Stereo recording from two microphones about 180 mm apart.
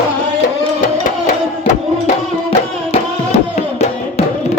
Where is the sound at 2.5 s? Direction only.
35° left (ahead or behind).